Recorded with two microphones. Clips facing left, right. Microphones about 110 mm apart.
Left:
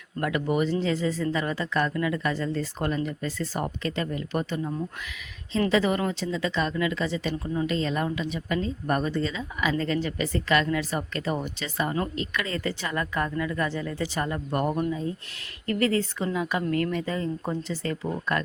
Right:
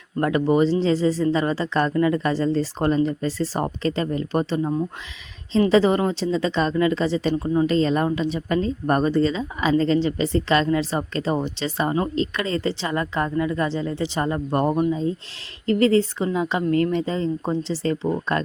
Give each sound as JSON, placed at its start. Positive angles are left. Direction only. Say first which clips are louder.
{"t": 0.2, "sound": "speech", "louder": "right 7 dB", "side_deg": -35}